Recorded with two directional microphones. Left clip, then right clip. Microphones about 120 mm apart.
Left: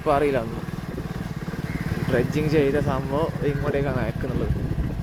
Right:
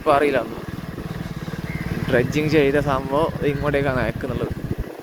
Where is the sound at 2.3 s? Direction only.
15° right (ahead or behind); by 4.1 s 35° right (ahead or behind).